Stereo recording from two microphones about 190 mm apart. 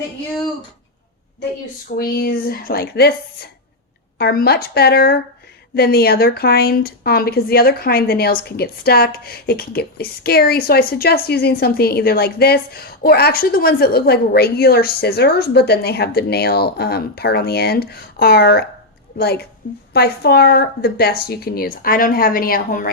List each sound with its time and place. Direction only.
2.0 s a woman's voice: 50° left (ahead or behind)